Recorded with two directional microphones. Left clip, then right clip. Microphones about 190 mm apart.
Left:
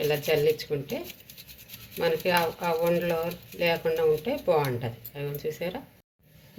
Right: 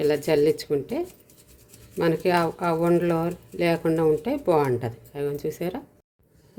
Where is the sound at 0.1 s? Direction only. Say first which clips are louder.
Right 3 dB; 75° right (ahead or behind).